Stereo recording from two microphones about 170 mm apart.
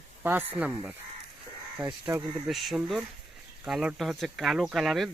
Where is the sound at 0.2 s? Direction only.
10° right (ahead or behind).